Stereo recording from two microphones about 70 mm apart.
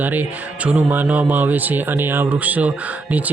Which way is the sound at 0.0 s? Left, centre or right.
Right.